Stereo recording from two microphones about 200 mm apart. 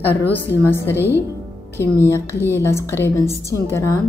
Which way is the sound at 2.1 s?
15° left (ahead or behind).